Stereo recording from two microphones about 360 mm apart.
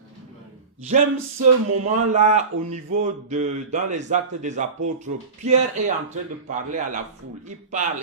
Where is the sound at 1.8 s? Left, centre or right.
Centre.